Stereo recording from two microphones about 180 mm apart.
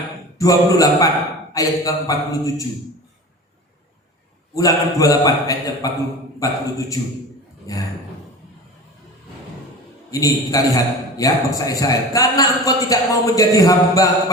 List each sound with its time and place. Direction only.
0.3 s a man's voice: 20° left (ahead or behind)
4.5 s a man's voice: 20° left (ahead or behind)
10.1 s a man's voice: 20° left (ahead or behind)